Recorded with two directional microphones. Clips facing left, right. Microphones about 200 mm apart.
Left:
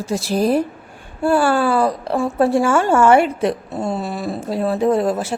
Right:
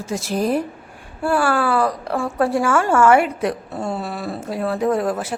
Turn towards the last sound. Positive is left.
turn(degrees=25)  # may be behind; listen again after turning